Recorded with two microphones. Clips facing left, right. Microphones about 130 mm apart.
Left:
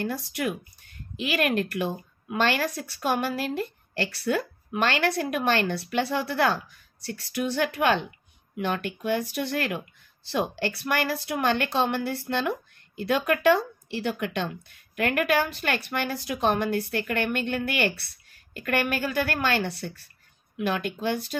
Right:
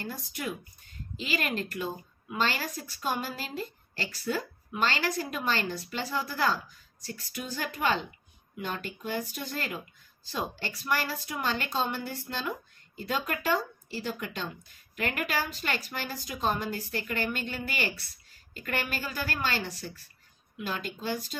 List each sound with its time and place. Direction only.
0.0 s a woman's voice: 75° left (ahead or behind)